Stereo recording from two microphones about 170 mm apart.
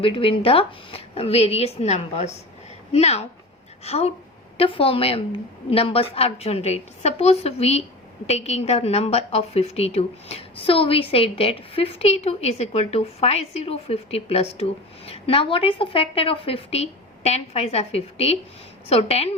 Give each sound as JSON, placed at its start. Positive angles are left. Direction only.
{"t": 0.0, "sound": "a woman's voice", "side_deg": 30}